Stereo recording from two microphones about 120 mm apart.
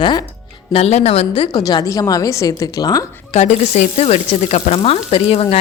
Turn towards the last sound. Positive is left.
turn(degrees=55)  # may be behind; listen again after turning